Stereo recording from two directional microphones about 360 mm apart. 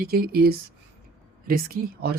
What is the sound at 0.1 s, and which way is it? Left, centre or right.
Speech, right.